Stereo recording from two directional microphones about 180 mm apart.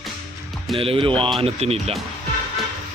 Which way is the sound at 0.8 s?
30° right (ahead or behind).